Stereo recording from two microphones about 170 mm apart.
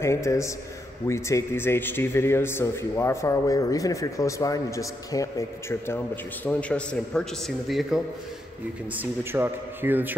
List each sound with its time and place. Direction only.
0.0 s speech: 15° left (ahead or behind); by 8.0 s centre (ahead or behind)
8.9 s a man's voice: 15° right (ahead or behind)